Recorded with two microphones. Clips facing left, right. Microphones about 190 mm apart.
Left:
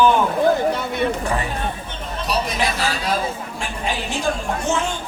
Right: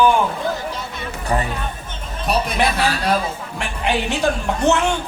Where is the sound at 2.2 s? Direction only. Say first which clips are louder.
Right 3 dB; 60° right (ahead or behind).